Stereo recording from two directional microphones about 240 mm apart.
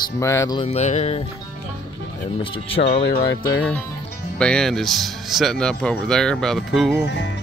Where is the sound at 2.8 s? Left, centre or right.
Left.